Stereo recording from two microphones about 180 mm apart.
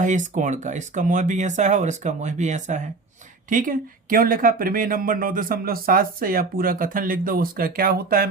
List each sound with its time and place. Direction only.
0.0 s speech: 45° right (ahead or behind)